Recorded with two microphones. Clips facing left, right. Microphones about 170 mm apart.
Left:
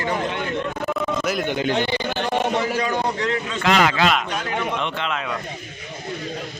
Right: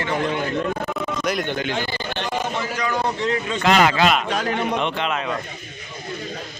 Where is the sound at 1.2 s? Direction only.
5° left (ahead or behind).